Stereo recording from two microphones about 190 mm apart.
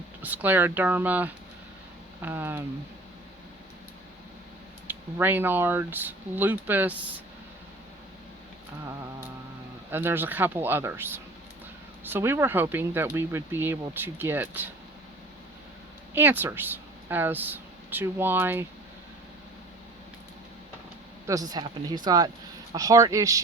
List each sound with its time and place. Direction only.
0.2 s speech: 10° right (ahead or behind)
4.9 s speech: 10° right (ahead or behind)
9.9 s speech: 10° right (ahead or behind)
16.1 s speech: 10° right (ahead or behind)
21.2 s speech: 20° right (ahead or behind)